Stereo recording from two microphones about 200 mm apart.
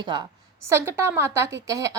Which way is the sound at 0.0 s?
20° right (ahead or behind).